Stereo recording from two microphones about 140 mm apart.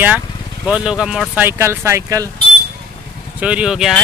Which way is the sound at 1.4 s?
15° right (ahead or behind).